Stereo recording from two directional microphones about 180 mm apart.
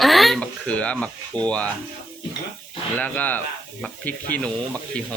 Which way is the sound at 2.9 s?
10° left (ahead or behind).